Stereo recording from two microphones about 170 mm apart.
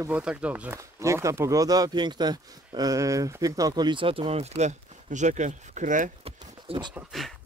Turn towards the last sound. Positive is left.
turn(degrees=0)  # may be behind; listen again after turning